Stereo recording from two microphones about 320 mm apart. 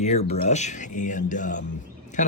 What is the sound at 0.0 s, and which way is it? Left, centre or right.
Speech, left.